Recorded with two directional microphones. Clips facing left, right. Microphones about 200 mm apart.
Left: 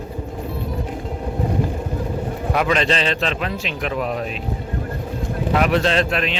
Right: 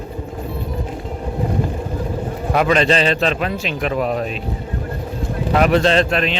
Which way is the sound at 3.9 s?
40° right (ahead or behind).